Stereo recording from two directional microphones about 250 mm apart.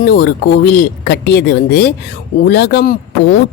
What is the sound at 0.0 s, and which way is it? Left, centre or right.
Speech, left.